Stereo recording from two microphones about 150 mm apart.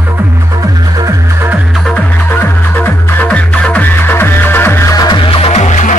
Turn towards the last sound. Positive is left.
turn(degrees=50)  # may be behind; listen again after turning